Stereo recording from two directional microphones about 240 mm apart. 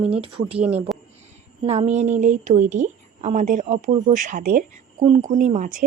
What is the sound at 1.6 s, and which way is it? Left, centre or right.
A woman's voice, right.